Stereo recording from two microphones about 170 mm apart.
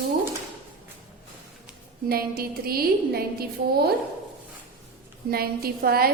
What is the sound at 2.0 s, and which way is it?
A woman's voice, 60° right (ahead or behind).